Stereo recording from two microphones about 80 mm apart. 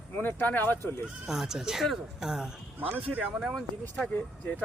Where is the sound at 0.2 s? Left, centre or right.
Left.